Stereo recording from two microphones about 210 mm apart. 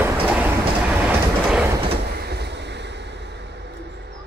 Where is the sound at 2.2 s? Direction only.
50° right (ahead or behind).